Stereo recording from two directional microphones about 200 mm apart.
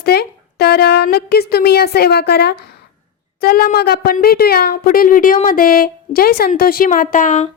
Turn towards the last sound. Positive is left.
turn(degrees=40)  # may be behind; listen again after turning